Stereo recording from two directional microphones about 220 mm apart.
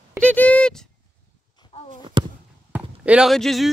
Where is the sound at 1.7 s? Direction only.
30° left (ahead or behind).